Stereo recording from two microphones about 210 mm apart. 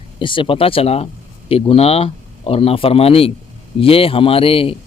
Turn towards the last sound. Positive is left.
turn(degrees=25)  # may be behind; listen again after turning